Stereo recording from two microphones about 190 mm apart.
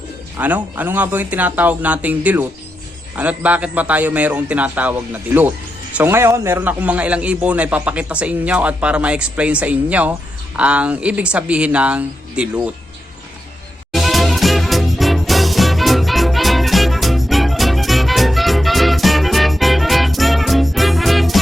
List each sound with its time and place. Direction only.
0.3 s a man's voice: 10° right (ahead or behind)
13.9 s swing music: centre (ahead or behind)